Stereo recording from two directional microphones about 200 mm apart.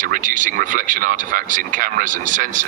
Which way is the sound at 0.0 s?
40° right (ahead or behind).